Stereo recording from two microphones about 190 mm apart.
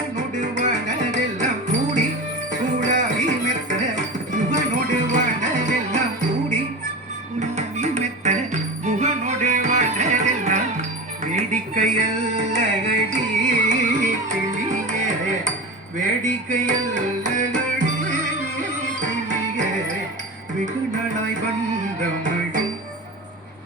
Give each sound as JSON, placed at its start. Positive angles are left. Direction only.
{"t": 0.2, "sound": "music", "side_deg": -40}